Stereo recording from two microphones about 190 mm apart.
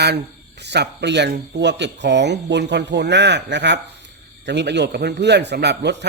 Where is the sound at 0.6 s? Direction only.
65° right (ahead or behind).